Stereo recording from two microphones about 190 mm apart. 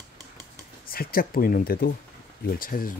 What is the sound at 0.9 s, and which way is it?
Speech, 50° left (ahead or behind).